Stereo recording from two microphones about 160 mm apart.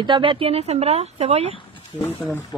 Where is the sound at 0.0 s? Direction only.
30° right (ahead or behind).